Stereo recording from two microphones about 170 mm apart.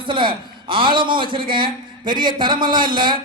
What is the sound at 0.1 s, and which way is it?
A man's voice, 30° right (ahead or behind).